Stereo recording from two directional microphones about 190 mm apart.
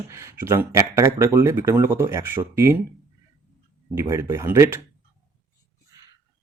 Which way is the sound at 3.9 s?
15° right (ahead or behind).